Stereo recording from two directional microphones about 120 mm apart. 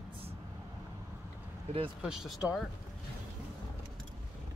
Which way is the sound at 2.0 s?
5° right (ahead or behind).